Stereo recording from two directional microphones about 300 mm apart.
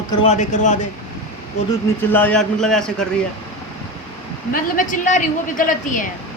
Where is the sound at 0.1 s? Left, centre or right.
Left.